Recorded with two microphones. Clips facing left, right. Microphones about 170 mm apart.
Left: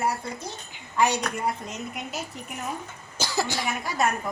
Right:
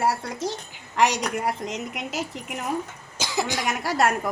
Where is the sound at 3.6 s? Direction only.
90° right.